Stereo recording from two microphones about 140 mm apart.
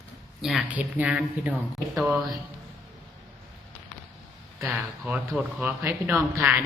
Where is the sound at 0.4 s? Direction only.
5° right (ahead or behind).